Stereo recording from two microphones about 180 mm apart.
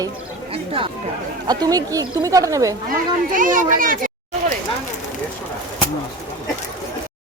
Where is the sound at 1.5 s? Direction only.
20° right (ahead or behind).